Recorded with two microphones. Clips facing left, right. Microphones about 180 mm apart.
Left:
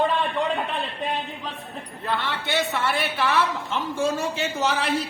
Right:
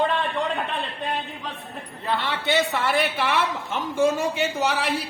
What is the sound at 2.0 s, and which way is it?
A man's voice, 15° right (ahead or behind).